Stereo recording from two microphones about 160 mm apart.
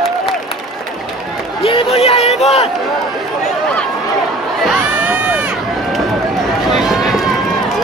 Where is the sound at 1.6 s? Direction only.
35° left (ahead or behind).